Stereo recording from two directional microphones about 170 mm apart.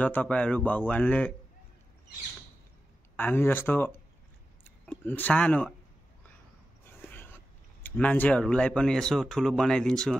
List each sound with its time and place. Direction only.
0.0 s speech: 10° left (ahead or behind)
3.2 s speech: 10° left (ahead or behind)
7.0 s a sound: 10° left (ahead or behind)
7.8 s speech: 10° left (ahead or behind)